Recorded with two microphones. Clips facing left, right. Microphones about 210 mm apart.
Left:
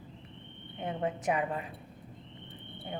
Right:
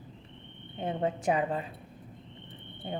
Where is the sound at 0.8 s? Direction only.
30° right (ahead or behind).